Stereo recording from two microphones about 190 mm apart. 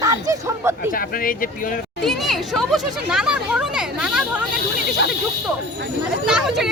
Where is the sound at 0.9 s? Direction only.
50° left (ahead or behind).